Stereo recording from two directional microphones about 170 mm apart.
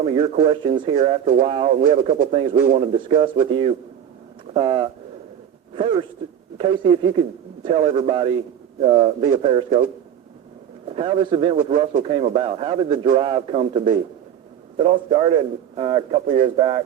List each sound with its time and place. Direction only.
0.0 s speech: 35° right (ahead or behind)
10.8 s a man's voice: 35° right (ahead or behind)